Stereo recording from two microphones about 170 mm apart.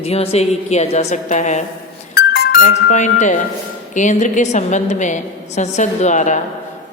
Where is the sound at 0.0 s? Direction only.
35° left (ahead or behind).